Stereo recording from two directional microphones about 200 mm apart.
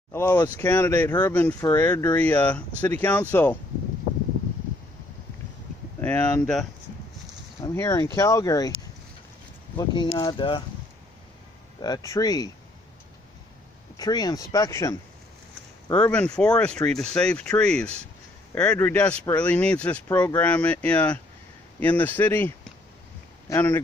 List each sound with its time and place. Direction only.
0.1 s speech: 10° left (ahead or behind)
5.9 s speech: 5° left (ahead or behind)
7.6 s speech: 15° left (ahead or behind)
9.8 s speech: 20° left (ahead or behind)
11.8 s speech: 20° left (ahead or behind)
13.9 s speech: 20° left (ahead or behind)
23.5 s speech: 10° left (ahead or behind)